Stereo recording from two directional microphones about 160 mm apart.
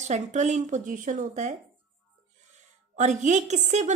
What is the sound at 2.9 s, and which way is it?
Speech, 45° right (ahead or behind).